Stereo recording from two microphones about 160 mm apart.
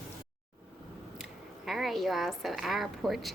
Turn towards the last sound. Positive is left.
turn(degrees=0)  # may be behind; listen again after turning